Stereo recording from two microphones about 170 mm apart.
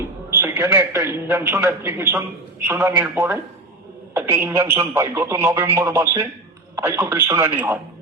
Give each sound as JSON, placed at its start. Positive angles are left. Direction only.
{"t": 0.4, "sound": "a man's voice", "side_deg": -15}